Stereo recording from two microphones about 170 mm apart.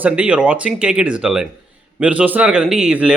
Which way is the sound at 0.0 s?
10° right (ahead or behind).